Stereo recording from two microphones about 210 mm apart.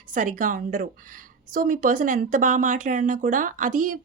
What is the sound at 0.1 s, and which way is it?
Speech, 40° right (ahead or behind).